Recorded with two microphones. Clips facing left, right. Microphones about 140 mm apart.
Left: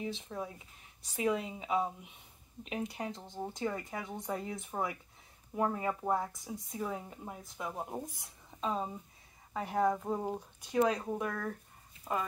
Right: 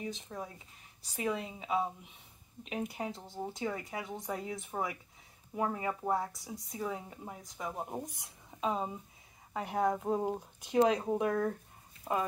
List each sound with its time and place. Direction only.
0.3 s speech: centre (ahead or behind)
9.8 s speech: 15° right (ahead or behind)